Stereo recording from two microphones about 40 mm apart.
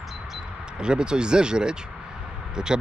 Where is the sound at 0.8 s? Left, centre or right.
Right.